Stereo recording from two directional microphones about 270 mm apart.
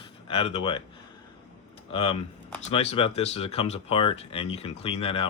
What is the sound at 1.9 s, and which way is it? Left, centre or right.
Speech, left.